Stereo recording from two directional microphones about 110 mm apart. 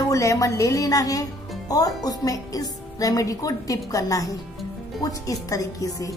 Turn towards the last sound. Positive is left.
turn(degrees=30)  # may be behind; listen again after turning